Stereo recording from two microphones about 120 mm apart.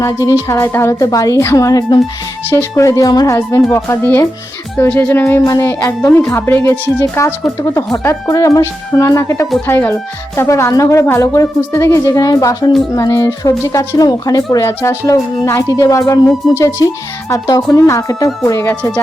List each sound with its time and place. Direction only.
0.4 s speech: 20° left (ahead or behind)
18.7 s speech: 10° left (ahead or behind)